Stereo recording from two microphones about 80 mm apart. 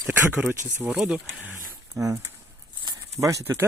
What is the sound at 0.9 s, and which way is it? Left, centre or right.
Speech, centre.